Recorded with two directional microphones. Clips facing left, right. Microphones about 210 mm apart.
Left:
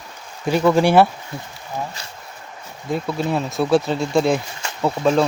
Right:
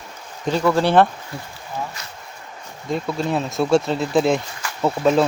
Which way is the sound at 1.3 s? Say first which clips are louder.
Left 1 dB; 20° left (ahead or behind).